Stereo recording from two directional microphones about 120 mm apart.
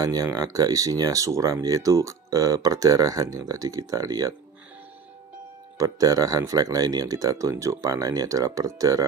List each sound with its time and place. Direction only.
0.0 s speech: 30° right (ahead or behind)
5.8 s speech: 30° right (ahead or behind)